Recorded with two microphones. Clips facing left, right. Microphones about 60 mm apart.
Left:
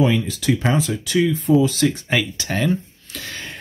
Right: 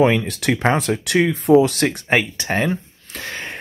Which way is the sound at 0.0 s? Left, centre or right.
Right.